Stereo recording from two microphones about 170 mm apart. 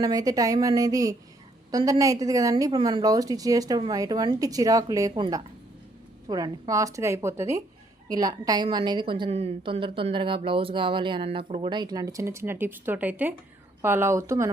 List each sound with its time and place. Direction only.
0.0 s a woman's voice: 20° right (ahead or behind)